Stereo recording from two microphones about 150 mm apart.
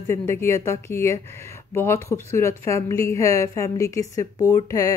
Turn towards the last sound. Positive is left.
turn(degrees=20)  # may be behind; listen again after turning